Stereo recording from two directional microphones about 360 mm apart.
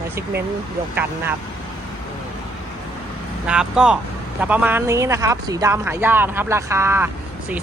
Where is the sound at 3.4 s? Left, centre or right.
Centre.